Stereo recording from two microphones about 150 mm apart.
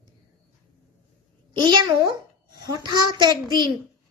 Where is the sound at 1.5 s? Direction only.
30° right (ahead or behind).